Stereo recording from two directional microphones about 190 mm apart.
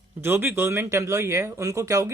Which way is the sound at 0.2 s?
10° right (ahead or behind).